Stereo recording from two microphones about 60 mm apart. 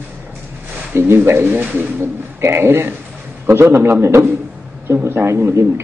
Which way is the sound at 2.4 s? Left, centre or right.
Right.